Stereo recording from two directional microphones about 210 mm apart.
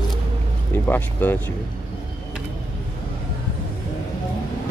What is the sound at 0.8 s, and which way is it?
Speech, 10° left (ahead or behind).